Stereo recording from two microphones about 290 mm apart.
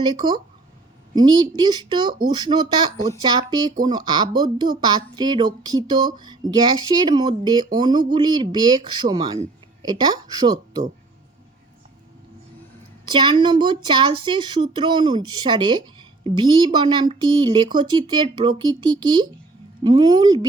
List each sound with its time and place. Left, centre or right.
0.0 s speech: centre
13.1 s speech: centre